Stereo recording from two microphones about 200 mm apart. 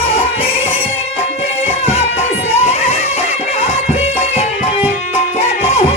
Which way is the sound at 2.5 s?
30° left (ahead or behind).